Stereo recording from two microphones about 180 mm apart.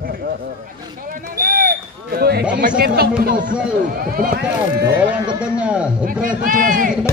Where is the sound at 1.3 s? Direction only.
55° right (ahead or behind).